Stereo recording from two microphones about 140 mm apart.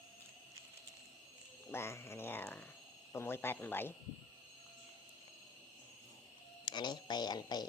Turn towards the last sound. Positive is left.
turn(degrees=30)  # may be behind; listen again after turning